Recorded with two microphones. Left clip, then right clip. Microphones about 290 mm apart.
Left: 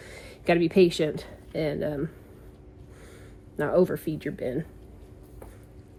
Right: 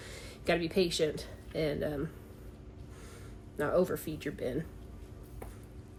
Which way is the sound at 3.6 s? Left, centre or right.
Centre.